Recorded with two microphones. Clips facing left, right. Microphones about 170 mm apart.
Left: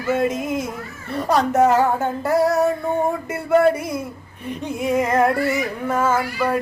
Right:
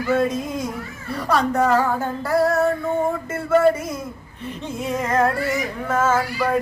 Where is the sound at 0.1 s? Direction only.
20° left (ahead or behind).